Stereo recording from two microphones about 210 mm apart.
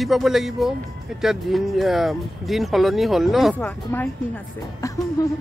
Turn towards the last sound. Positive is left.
turn(degrees=15)  # may be behind; listen again after turning